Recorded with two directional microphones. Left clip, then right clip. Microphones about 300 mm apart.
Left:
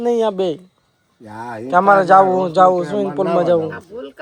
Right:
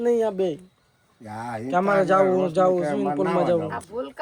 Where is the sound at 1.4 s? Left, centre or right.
Centre.